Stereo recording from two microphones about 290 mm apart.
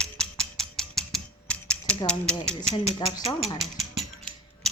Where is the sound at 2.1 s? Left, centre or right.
Centre.